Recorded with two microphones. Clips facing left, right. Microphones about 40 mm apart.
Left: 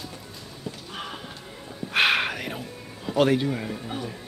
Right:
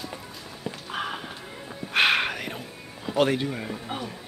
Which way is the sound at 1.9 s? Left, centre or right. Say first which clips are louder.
Even; centre.